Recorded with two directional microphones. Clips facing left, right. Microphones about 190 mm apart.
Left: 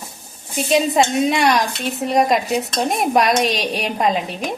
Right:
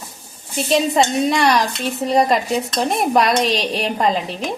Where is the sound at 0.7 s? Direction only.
5° left (ahead or behind).